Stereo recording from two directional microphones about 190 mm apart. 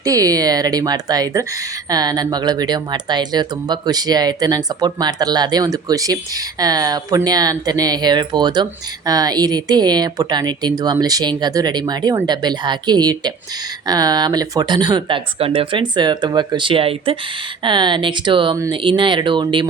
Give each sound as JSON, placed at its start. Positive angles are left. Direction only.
{"t": 0.0, "sound": "speech", "side_deg": -20}